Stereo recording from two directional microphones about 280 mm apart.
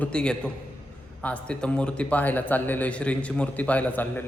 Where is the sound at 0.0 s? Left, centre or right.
Centre.